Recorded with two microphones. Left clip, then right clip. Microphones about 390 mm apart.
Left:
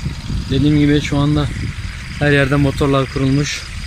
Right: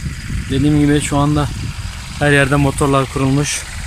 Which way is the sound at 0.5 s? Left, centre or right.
Centre.